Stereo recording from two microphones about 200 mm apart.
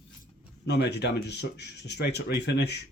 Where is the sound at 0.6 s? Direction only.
55° left (ahead or behind).